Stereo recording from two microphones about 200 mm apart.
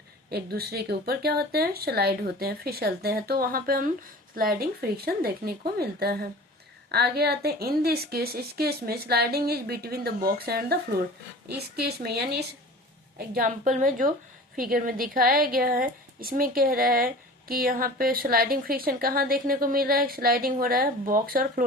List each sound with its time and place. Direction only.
0.3 s speech: 50° right (ahead or behind)